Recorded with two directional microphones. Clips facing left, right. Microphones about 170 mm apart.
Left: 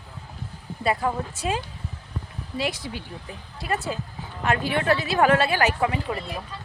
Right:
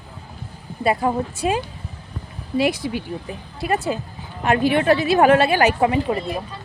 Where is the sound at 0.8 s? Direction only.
15° right (ahead or behind).